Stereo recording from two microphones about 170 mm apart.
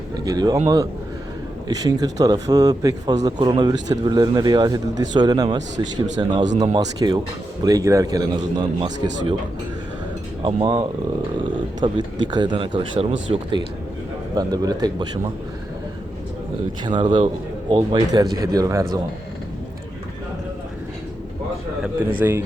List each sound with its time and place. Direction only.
0.3 s speech: 20° right (ahead or behind)
1.6 s speech: 20° right (ahead or behind)
10.4 s speech: 25° right (ahead or behind)
14.3 s speech: 25° right (ahead or behind)
16.8 s speech: 25° right (ahead or behind)
22.0 s a man's voice: 10° right (ahead or behind)